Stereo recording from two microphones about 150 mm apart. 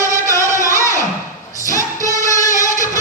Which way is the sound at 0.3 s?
20° left (ahead or behind).